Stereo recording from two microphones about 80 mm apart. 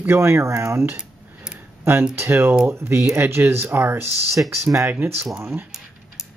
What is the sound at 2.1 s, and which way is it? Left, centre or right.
Speech, right.